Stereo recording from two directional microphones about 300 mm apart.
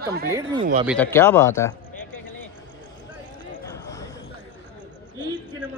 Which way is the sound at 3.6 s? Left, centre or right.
Centre.